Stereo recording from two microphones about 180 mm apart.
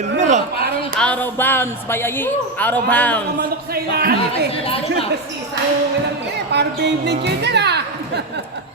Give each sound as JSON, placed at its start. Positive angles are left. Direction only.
{"t": 0.2, "sound": "a sound", "side_deg": -40}
{"t": 0.9, "sound": "speech", "side_deg": 5}
{"t": 3.8, "sound": "speech", "side_deg": -55}
{"t": 4.6, "sound": "a woman's voice", "side_deg": 30}
{"t": 6.5, "sound": "a woman's voice", "side_deg": -70}